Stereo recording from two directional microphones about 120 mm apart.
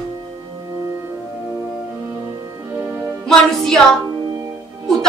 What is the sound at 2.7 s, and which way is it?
Music, 20° right (ahead or behind).